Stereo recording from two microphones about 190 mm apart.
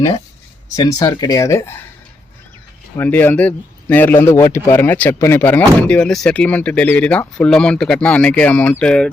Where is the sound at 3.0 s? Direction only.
10° left (ahead or behind).